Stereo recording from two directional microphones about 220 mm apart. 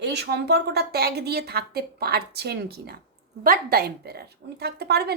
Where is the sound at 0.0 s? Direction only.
50° right (ahead or behind).